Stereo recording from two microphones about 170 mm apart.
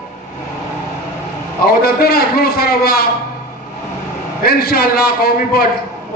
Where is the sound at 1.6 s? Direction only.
65° left (ahead or behind).